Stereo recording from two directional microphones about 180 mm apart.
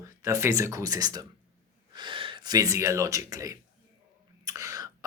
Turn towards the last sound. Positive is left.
turn(degrees=-20)  # may be behind; listen again after turning